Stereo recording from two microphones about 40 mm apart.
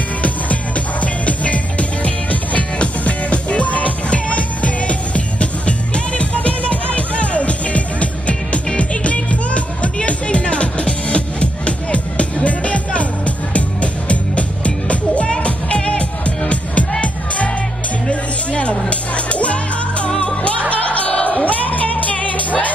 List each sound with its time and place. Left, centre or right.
0.2 s music: left
18.5 s music: left